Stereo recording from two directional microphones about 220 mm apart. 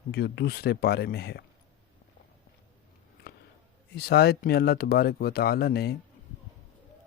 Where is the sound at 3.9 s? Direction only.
45° left (ahead or behind).